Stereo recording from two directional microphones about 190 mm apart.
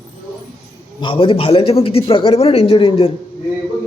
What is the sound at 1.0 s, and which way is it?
Speech, 25° left (ahead or behind).